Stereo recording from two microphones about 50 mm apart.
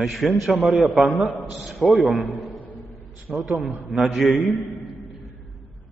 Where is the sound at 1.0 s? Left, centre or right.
Right.